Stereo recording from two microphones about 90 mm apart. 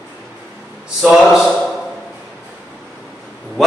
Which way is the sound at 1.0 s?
5° right (ahead or behind).